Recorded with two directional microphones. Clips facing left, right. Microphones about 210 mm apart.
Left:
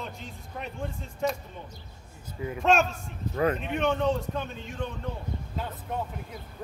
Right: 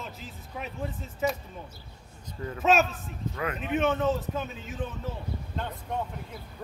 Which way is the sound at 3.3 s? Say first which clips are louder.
Left 8 dB; 35° left (ahead or behind).